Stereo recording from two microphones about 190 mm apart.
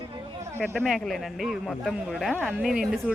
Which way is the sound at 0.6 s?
5° left (ahead or behind).